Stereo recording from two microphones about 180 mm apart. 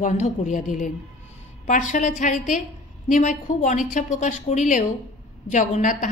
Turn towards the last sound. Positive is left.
turn(degrees=45)  # may be behind; listen again after turning